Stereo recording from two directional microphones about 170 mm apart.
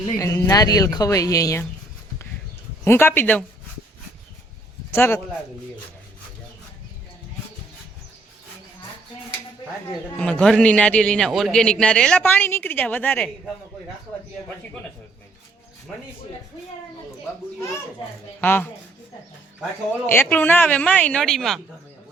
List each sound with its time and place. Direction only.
0.2 s speech: 15° left (ahead or behind)
2.8 s a man's voice: 15° left (ahead or behind)
4.9 s a man's voice: 15° left (ahead or behind)
10.2 s a man's voice: 5° left (ahead or behind)
15.9 s speech: centre (ahead or behind)
18.3 s a man's voice: 10° left (ahead or behind)
20.1 s a man's voice: 10° left (ahead or behind)